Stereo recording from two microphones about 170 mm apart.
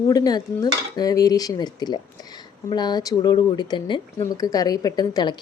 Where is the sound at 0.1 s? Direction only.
20° left (ahead or behind).